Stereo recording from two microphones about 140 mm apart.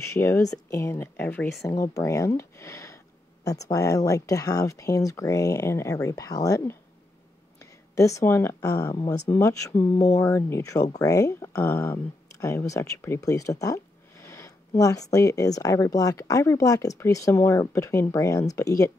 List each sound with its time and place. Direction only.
0.0 s speech: 20° left (ahead or behind)
7.9 s speech: 20° left (ahead or behind)
14.2 s a sound: 20° left (ahead or behind)
14.8 s speech: 25° left (ahead or behind)